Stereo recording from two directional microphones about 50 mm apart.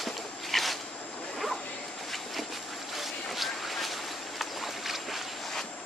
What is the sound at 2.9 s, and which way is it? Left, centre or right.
Boat, centre.